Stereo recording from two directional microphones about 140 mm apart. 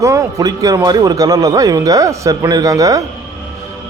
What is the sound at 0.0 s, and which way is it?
A man's voice, 25° right (ahead or behind).